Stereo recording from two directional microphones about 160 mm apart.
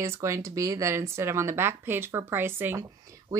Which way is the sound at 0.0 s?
20° right (ahead or behind).